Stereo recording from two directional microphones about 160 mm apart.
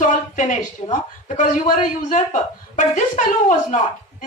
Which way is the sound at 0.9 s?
45° left (ahead or behind).